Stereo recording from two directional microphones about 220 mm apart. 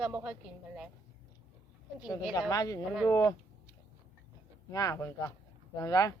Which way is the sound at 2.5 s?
15° left (ahead or behind).